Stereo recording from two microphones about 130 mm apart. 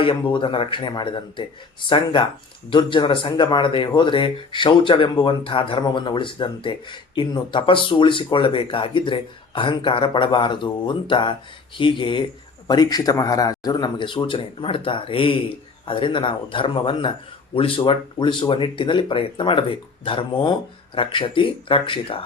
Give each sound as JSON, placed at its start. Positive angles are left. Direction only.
{"t": 0.0, "sound": "speech", "side_deg": 40}